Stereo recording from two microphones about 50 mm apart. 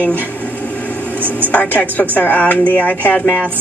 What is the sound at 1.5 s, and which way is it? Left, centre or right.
A woman's voice, left.